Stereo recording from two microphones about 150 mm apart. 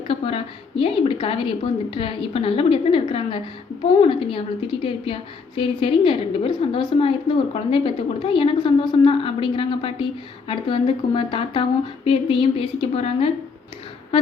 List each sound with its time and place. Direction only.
0.1 s a woman's voice: 40° left (ahead or behind)